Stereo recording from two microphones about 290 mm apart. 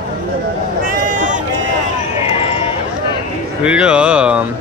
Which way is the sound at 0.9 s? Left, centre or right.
Right.